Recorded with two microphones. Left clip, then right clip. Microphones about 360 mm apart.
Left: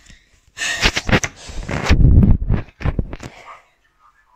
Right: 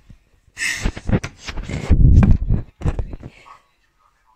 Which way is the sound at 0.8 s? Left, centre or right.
Left.